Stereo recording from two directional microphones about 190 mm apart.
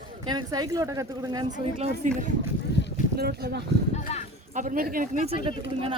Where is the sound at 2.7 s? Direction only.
60° left (ahead or behind).